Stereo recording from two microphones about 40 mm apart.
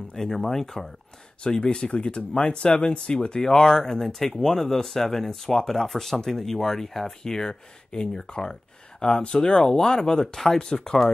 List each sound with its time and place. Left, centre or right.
0.1 s speech: centre
1.4 s speech: left
4.0 s speech: centre